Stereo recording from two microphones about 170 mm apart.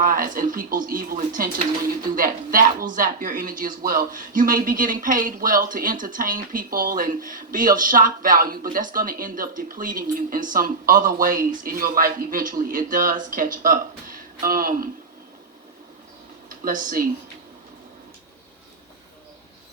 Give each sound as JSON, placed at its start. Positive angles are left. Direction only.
{"t": 0.0, "sound": "speech", "side_deg": -55}
{"t": 16.5, "sound": "speech", "side_deg": -55}